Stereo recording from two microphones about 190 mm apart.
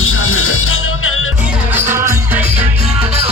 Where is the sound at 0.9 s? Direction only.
90° left.